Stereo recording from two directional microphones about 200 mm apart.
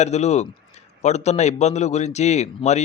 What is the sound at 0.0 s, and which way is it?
A man's voice, 35° left (ahead or behind).